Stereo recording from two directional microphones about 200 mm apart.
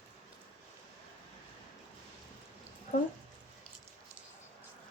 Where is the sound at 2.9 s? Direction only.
45° left (ahead or behind).